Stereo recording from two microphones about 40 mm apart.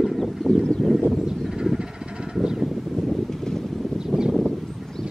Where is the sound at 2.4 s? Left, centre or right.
Centre.